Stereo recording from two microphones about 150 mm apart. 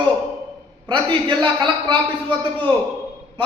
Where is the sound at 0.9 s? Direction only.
30° right (ahead or behind).